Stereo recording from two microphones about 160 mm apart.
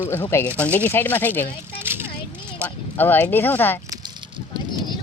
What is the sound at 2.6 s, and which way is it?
Speech, 10° left (ahead or behind).